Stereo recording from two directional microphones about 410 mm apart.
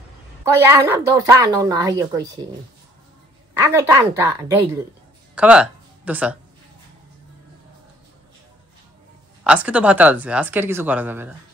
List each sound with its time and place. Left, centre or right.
0.6 s a woman's voice: centre
3.5 s a woman's voice: centre
9.4 s speech: centre